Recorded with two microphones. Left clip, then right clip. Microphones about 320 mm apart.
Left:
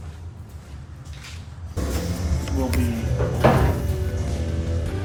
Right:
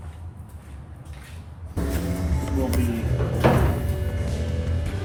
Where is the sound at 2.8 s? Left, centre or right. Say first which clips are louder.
Left 2 dB; centre.